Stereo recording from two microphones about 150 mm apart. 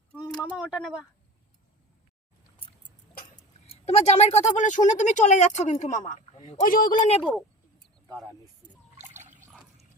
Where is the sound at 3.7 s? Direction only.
45° left (ahead or behind).